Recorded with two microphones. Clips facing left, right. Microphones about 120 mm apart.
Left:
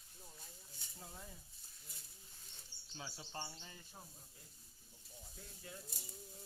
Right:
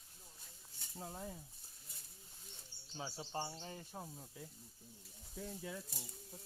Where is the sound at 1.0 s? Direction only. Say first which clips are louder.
Right 8 dB; 45° right (ahead or behind).